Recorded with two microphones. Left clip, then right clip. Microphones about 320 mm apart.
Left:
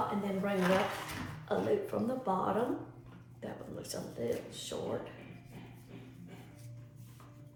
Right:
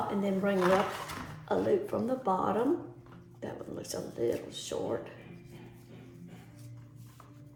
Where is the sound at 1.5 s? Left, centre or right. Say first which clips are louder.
Right 4 dB; right.